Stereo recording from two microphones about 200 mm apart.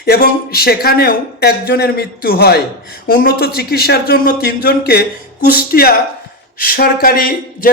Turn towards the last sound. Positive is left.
turn(degrees=45)  # may be behind; listen again after turning